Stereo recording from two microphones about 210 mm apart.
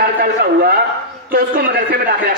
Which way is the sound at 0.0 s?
50° right (ahead or behind).